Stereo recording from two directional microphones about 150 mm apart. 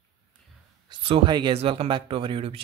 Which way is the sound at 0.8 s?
35° right (ahead or behind).